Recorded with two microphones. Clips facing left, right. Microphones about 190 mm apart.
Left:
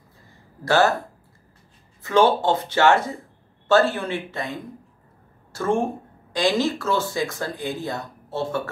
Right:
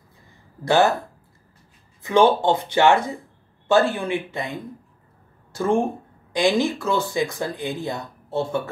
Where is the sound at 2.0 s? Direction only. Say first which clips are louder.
Right 1 dB; 15° right (ahead or behind).